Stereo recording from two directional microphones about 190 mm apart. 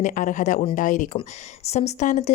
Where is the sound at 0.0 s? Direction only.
40° left (ahead or behind).